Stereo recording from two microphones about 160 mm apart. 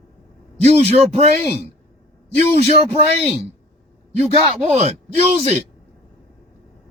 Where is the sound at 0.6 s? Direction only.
40° right (ahead or behind).